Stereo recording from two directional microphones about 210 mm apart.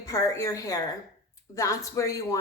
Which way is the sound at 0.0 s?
15° left (ahead or behind).